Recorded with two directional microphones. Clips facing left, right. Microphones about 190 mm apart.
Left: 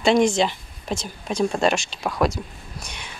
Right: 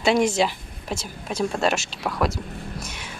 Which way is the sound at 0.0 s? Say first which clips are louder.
Left 2 dB; 5° right (ahead or behind).